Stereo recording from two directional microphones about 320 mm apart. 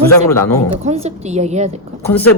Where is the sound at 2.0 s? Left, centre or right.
Centre.